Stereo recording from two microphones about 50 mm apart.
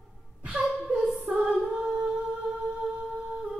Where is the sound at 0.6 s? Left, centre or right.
Centre.